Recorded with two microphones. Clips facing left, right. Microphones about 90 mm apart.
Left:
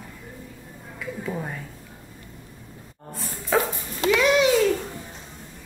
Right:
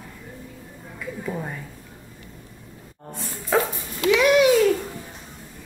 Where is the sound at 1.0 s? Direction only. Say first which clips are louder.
Even; centre (ahead or behind).